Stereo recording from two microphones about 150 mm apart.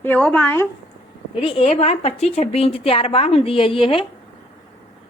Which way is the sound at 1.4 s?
40° left (ahead or behind).